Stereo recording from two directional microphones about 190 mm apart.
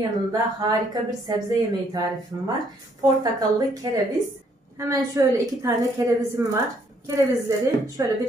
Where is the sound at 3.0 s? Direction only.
20° right (ahead or behind).